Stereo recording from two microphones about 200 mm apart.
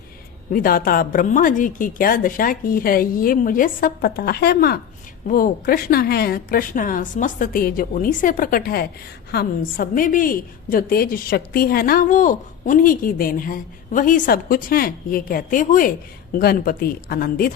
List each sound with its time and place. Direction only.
0.5 s a woman's voice: 45° left (ahead or behind)